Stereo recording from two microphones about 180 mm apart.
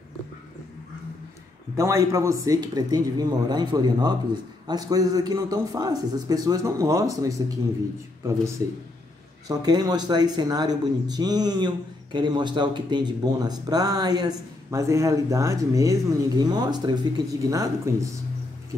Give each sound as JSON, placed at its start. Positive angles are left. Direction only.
{"t": 1.8, "sound": "speech", "side_deg": -15}
{"t": 9.5, "sound": "speech", "side_deg": -20}